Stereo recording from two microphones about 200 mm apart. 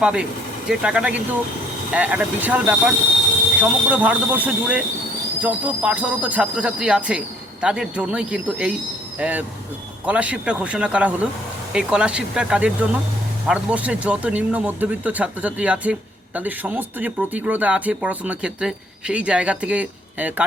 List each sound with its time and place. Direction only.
0.0 s speech: 5° right (ahead or behind)